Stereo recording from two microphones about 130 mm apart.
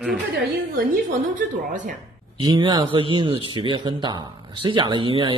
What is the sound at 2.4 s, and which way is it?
Speech, 35° right (ahead or behind).